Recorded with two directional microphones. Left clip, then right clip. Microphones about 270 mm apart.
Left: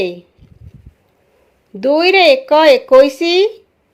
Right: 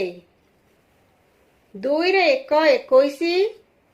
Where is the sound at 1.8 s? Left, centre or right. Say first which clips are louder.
Left 9 dB; left.